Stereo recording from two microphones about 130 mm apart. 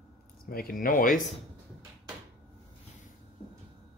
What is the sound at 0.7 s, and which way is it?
Speech, 90° left.